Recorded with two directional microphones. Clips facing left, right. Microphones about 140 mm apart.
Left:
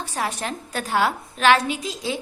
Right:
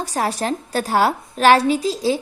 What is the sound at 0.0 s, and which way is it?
A woman's voice, 40° right (ahead or behind).